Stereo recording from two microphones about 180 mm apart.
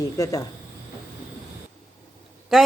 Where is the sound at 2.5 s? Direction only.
Centre (ahead or behind).